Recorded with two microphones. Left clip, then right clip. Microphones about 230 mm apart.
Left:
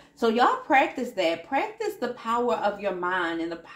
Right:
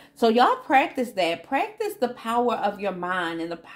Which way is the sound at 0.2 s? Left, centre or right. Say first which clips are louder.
Right 3 dB; right.